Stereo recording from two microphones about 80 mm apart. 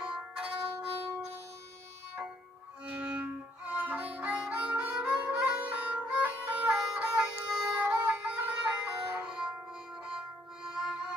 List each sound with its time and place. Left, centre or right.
0.0 s music: centre
2.9 s music: centre